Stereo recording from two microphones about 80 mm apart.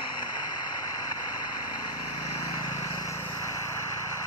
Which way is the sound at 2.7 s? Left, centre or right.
Left.